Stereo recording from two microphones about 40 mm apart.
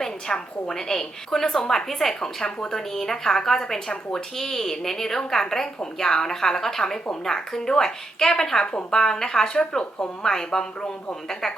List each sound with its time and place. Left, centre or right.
0.0 s a woman's voice: centre